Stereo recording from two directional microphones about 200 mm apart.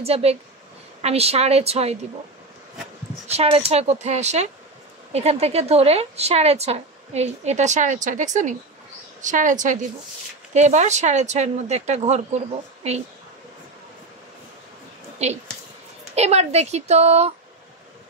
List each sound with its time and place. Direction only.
0.0 s a woman's voice: 30° right (ahead or behind)
3.3 s a woman's voice: 30° right (ahead or behind)
15.2 s a woman's voice: 30° right (ahead or behind)